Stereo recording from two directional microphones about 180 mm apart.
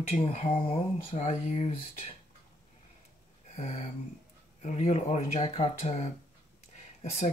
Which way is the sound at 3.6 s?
40° left (ahead or behind).